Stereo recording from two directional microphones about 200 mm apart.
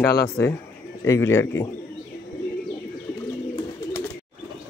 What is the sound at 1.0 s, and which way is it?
Speech, 15° left (ahead or behind).